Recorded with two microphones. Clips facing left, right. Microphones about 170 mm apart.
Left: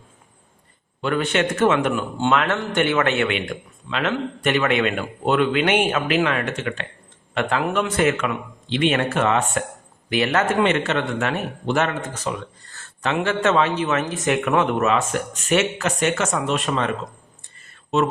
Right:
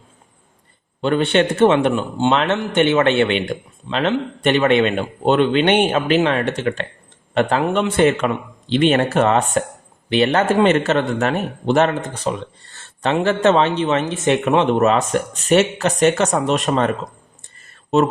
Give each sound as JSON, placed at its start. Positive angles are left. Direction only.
{"t": 1.0, "sound": "a man's voice", "side_deg": -30}